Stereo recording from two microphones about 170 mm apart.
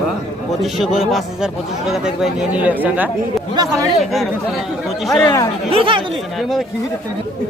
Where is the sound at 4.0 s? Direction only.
Centre (ahead or behind).